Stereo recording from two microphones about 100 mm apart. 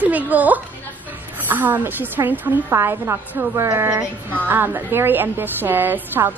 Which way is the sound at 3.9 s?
15° right (ahead or behind).